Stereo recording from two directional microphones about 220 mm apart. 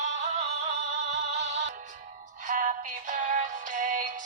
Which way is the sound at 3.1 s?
35° right (ahead or behind).